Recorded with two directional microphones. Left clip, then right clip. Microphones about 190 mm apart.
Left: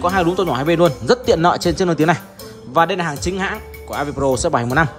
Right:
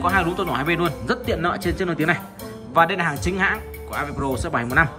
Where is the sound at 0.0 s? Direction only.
15° left (ahead or behind).